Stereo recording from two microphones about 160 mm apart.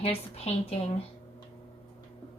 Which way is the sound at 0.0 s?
40° left (ahead or behind).